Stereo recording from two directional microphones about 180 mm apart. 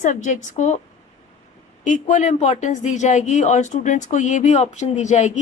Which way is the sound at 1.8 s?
45° left (ahead or behind).